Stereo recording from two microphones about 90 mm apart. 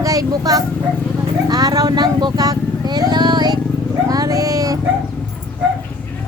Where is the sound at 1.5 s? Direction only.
45° right (ahead or behind).